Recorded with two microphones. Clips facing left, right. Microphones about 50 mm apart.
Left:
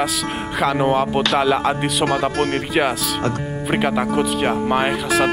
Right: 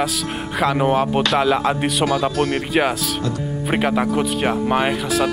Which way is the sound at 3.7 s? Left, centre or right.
Centre.